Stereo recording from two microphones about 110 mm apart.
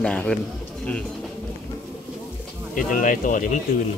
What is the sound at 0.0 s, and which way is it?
Speech, 5° left (ahead or behind).